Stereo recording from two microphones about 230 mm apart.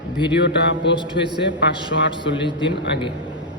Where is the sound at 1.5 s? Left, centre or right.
Left.